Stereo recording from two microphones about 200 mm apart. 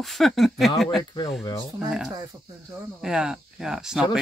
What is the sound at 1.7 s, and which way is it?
A man's voice, 5° right (ahead or behind).